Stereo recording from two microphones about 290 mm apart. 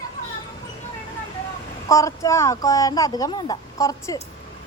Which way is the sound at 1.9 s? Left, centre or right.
Centre.